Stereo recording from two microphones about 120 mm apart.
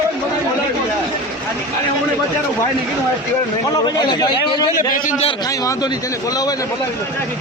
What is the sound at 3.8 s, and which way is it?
Speech, 35° left (ahead or behind).